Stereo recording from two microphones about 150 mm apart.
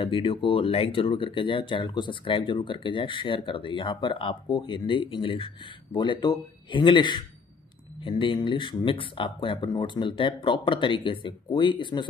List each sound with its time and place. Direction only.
0.0 s speech: 35° left (ahead or behind)